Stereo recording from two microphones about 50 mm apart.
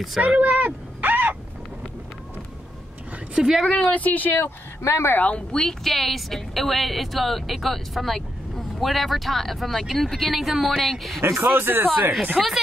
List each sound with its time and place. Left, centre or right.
0.4 s a sound: right
3.3 s speech: centre
3.6 s a woman's voice: centre
3.9 s speech: left
4.8 s speech: left
5.1 s speech: left
5.5 s a woman's voice: centre
11.1 s speech: right
11.5 s speech: right
12.4 s a woman's voice: centre